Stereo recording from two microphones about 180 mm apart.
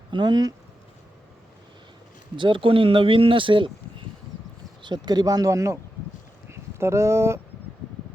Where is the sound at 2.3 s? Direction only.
25° right (ahead or behind).